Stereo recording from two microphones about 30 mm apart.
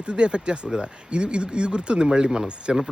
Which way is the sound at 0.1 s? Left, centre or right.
Right.